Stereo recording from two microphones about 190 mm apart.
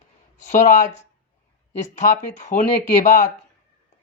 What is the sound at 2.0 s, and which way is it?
A man's voice, 45° left (ahead or behind).